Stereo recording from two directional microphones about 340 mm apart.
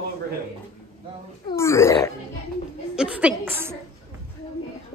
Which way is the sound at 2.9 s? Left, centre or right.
Centre.